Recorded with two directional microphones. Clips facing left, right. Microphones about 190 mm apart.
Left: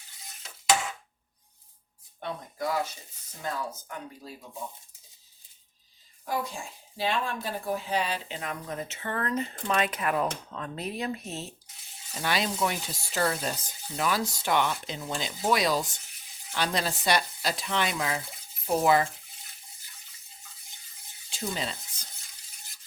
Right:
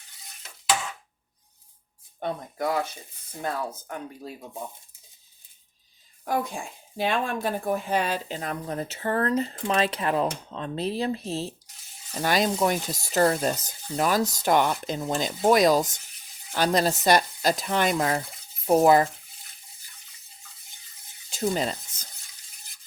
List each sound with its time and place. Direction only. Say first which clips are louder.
2.2 s speech: right 4 dB; 55° right (ahead or behind)
6.2 s a woman's voice: right 4 dB; 55° right (ahead or behind); by 11.5 s 30° right (ahead or behind)
12.2 s speech: right 5 dB; 45° right (ahead or behind)
21.2 s stir: right 7 dB; 45° right (ahead or behind)